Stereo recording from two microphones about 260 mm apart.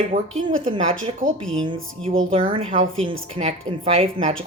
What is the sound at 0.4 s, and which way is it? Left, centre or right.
Speech, centre.